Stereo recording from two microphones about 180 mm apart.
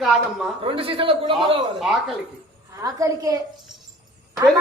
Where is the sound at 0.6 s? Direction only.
30° right (ahead or behind).